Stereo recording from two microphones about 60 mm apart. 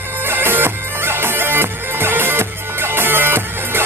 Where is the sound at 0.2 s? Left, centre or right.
Right.